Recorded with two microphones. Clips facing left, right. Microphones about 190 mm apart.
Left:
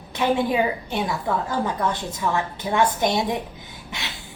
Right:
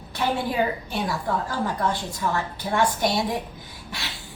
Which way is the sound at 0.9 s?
20° left (ahead or behind).